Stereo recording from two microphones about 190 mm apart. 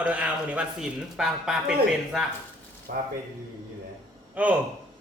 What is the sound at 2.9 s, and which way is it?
Speech, 50° right (ahead or behind).